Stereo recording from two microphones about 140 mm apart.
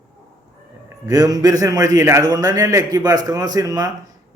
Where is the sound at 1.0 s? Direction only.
25° right (ahead or behind).